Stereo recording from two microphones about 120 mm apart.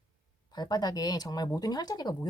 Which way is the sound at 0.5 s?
35° left (ahead or behind).